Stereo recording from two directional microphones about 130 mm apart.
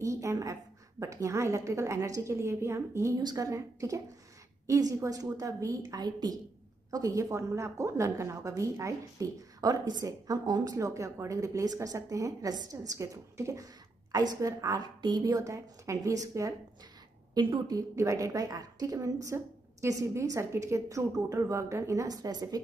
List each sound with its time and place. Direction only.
0.0 s a woman's voice: 25° right (ahead or behind)